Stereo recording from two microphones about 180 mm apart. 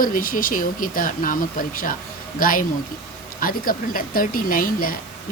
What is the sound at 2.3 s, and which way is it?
Speech, 50° left (ahead or behind).